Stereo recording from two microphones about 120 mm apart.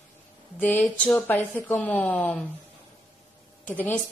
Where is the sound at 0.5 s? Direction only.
15° left (ahead or behind).